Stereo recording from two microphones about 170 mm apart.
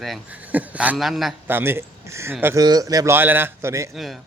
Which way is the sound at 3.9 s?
Centre (ahead or behind).